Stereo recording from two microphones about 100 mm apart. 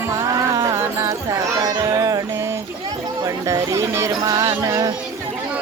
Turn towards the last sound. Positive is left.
turn(degrees=-40)  # may be behind; listen again after turning